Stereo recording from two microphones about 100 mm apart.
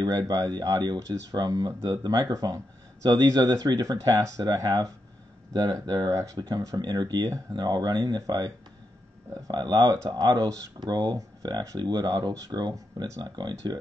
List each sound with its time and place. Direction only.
0.0 s speech: 35° right (ahead or behind)